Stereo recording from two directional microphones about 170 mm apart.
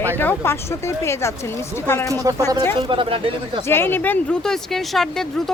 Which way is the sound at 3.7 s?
15° left (ahead or behind).